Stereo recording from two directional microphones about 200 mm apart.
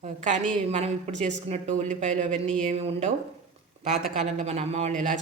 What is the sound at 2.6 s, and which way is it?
A man's voice, 30° right (ahead or behind).